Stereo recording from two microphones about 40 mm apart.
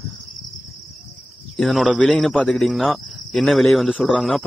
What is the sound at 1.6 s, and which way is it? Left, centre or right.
Speech, centre.